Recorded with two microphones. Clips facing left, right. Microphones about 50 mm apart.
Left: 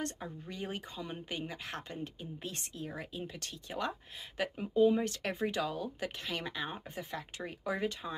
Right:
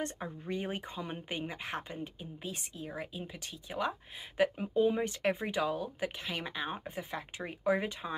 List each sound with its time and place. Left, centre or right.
0.0 s speech: right
2.0 s speech: centre